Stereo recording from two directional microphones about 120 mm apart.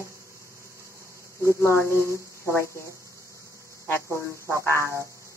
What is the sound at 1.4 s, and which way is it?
Speech, 25° left (ahead or behind).